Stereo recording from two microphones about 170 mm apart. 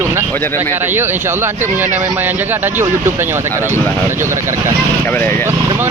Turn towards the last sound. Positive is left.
turn(degrees=15)  # may be behind; listen again after turning